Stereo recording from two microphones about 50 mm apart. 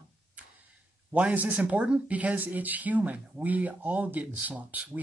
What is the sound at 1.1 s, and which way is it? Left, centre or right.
Speech, right.